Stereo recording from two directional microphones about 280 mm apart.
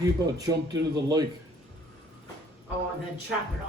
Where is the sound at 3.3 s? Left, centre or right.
Centre.